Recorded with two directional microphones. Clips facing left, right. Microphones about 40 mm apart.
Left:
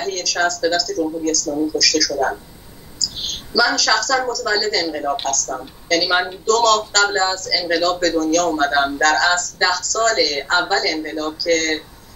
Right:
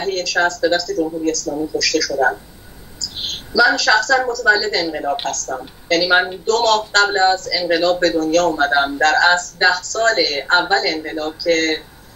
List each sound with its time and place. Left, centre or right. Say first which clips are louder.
0.0 s a man's voice: right 2 dB; right